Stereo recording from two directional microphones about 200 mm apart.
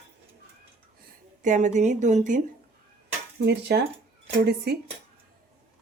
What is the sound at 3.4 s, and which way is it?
Speech, 55° right (ahead or behind).